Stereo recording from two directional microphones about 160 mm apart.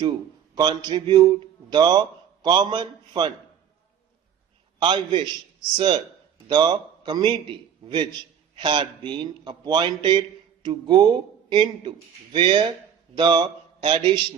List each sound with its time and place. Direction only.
0.5 s a man's voice: 25° right (ahead or behind)
4.8 s a man's voice: 30° right (ahead or behind)